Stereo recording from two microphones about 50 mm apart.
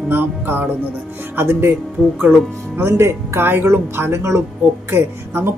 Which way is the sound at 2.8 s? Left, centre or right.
Right.